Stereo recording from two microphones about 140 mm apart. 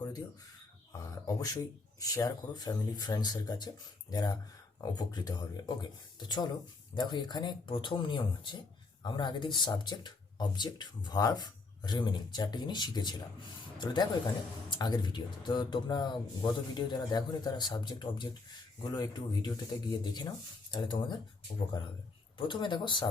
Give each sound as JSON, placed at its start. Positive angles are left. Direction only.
{"t": 2.0, "sound": "speech", "side_deg": 25}
{"t": 22.4, "sound": "speech", "side_deg": 35}